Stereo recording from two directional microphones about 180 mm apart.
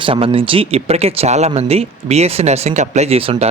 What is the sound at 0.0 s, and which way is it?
Speech, 30° right (ahead or behind).